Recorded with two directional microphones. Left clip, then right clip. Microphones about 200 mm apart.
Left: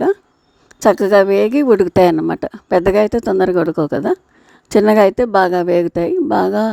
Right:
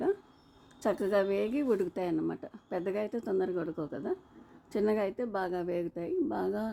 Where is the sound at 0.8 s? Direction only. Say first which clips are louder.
Left 18 dB; 45° left (ahead or behind).